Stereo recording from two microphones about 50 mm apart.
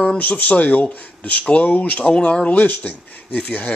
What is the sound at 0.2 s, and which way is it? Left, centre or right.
A man's voice, left.